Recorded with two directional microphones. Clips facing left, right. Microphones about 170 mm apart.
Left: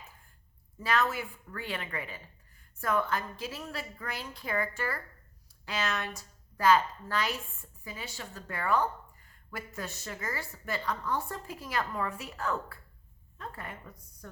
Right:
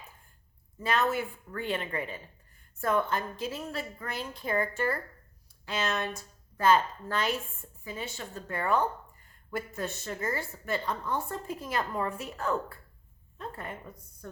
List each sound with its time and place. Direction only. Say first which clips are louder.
0.8 s a woman's voice: right 2 dB; 25° right (ahead or behind)
13.4 s a woman's voice: right 3 dB; 25° right (ahead or behind)